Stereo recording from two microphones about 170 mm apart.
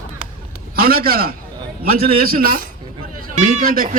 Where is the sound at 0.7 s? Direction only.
60° right (ahead or behind).